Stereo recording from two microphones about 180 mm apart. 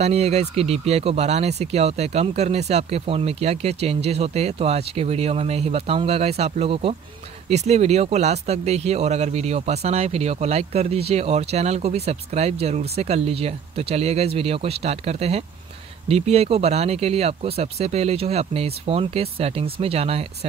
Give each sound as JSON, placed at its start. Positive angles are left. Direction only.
{"t": 0.0, "sound": "speech", "side_deg": -35}